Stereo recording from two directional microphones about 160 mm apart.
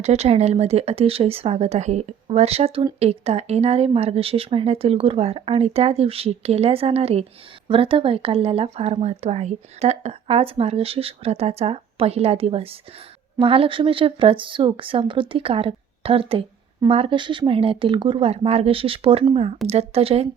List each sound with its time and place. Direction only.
0.0 s speech: 40° right (ahead or behind)